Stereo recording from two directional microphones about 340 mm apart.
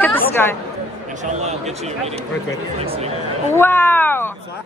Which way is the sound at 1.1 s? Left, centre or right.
Right.